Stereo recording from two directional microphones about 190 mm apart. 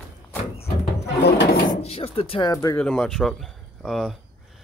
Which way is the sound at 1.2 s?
65° left (ahead or behind).